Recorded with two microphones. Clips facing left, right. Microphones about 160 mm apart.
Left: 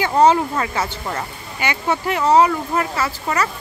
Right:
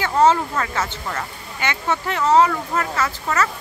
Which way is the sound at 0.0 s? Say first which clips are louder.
Left 2 dB; 15° left (ahead or behind).